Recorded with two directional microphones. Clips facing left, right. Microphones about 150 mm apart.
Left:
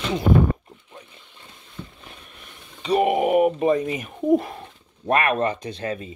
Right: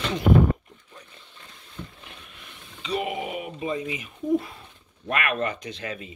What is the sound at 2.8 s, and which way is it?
Speech, 45° left (ahead or behind).